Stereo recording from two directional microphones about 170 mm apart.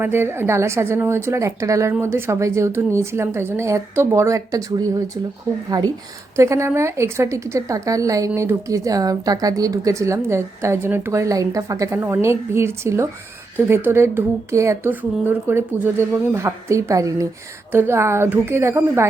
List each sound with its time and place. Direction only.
0.0 s a woman's voice: 15° right (ahead or behind)